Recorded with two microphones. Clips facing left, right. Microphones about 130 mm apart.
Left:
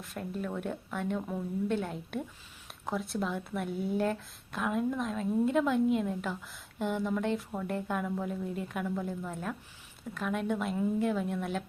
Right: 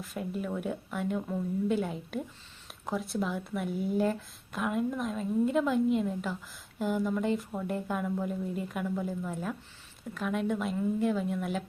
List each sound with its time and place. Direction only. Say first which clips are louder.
0.0 s speech: right 2 dB; 5° right (ahead or behind)